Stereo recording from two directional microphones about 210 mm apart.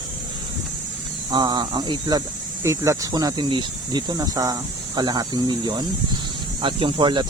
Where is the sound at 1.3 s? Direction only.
20° right (ahead or behind).